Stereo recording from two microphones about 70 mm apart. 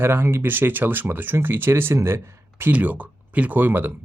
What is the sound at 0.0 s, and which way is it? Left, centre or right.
Speech, right.